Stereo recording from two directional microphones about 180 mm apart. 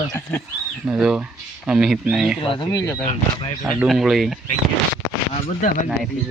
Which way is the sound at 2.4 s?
30° left (ahead or behind).